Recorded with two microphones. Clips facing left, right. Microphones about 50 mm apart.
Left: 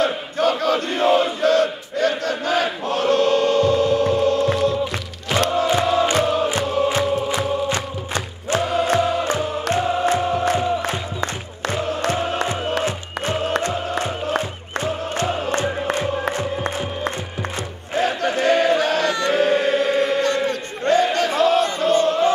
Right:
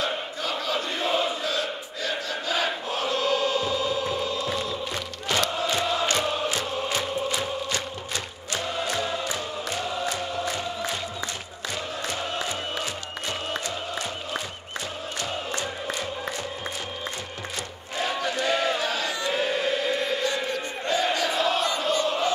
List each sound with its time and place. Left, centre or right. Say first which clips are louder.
0.0 s chant: left 9 dB; left
2.9 s music: left 10 dB; left
5.9 s music: left 7 dB; left
7.7 s music: left 6 dB; left
13.6 s music: left 8 dB; left
16.3 s music: left 9 dB; left
17.9 s chant: left 7 dB; left